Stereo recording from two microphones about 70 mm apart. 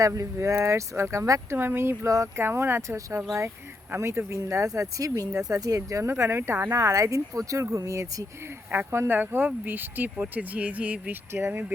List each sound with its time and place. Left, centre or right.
0.0 s speech: right
2.0 s speech: right
2.4 s speech: right
8.7 s speech: right